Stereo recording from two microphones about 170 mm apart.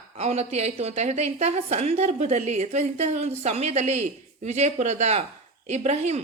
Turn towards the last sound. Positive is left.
turn(degrees=-40)  # may be behind; listen again after turning